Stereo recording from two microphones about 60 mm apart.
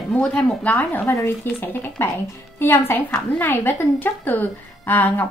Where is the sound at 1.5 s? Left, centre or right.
Left.